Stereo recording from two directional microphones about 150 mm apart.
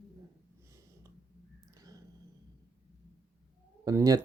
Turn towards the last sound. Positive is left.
turn(degrees=-20)  # may be behind; listen again after turning